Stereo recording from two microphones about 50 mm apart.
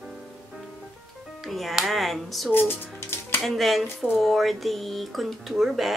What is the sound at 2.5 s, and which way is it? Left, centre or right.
Speech, left.